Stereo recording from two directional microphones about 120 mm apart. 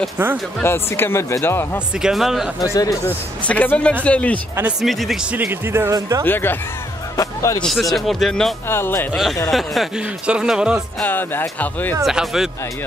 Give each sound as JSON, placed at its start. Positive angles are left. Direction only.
{"t": 0.6, "sound": "speech", "side_deg": 20}
{"t": 2.0, "sound": "speech", "side_deg": -5}
{"t": 3.1, "sound": "speech", "side_deg": 15}
{"t": 4.8, "sound": "speech", "side_deg": 0}
{"t": 5.3, "sound": "speech", "side_deg": -15}
{"t": 6.2, "sound": "speech", "side_deg": 15}
{"t": 7.2, "sound": "music", "side_deg": 25}
{"t": 7.6, "sound": "speech", "side_deg": 0}
{"t": 8.6, "sound": "speech", "side_deg": 20}
{"t": 9.1, "sound": "speech", "side_deg": 0}
{"t": 11.1, "sound": "speech", "side_deg": 15}
{"t": 12.0, "sound": "speech", "side_deg": -5}